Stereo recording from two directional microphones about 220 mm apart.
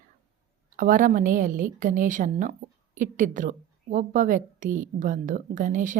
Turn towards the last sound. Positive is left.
turn(degrees=-35)  # may be behind; listen again after turning